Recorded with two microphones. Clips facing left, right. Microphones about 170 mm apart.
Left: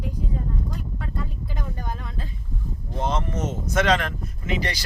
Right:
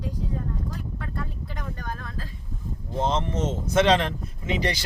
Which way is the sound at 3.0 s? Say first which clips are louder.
Right 1 dB; 25° right (ahead or behind).